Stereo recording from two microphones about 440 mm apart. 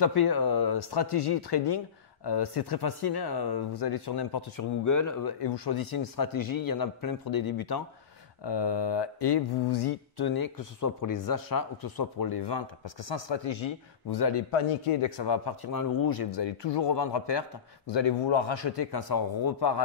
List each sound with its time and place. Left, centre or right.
0.0 s speech: left
4.8 s a man's voice: left
5.4 s a man's voice: left
8.5 s speech: left